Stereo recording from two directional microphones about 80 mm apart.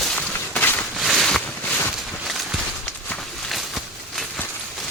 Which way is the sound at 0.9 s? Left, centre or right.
Centre.